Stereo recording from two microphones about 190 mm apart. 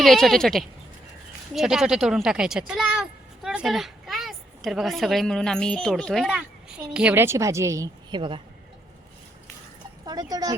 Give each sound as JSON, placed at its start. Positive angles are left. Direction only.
{"t": 0.0, "sound": "a woman's voice", "side_deg": 0}
{"t": 10.1, "sound": "speech", "side_deg": -20}